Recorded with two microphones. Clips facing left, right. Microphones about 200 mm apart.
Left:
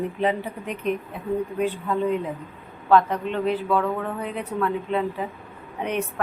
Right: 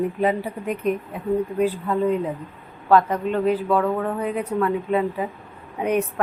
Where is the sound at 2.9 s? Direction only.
5° right (ahead or behind).